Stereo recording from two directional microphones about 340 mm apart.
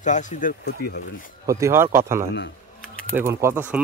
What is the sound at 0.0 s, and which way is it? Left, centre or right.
Speech, left.